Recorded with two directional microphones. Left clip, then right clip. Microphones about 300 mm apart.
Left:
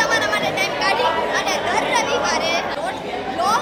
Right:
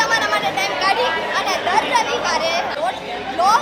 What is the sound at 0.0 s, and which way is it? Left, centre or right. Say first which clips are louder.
Chatter: right 1 dB; centre.